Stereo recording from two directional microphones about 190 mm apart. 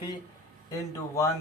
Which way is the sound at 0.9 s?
15° left (ahead or behind).